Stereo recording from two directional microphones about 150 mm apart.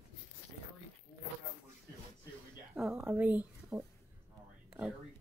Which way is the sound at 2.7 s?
5° right (ahead or behind).